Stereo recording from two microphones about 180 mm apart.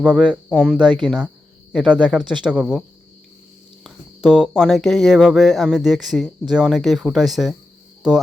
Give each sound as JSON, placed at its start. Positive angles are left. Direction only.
{"t": 0.0, "sound": "speech", "side_deg": -5}
{"t": 3.8, "sound": "speech", "side_deg": 0}